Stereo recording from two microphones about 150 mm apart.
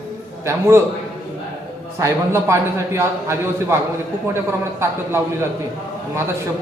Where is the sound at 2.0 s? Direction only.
20° right (ahead or behind).